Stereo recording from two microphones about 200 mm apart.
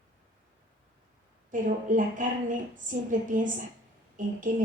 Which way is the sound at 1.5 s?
40° right (ahead or behind).